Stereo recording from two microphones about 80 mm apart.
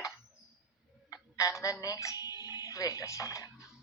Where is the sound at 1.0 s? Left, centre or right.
Left.